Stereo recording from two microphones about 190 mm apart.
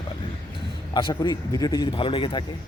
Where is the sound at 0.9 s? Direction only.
20° left (ahead or behind).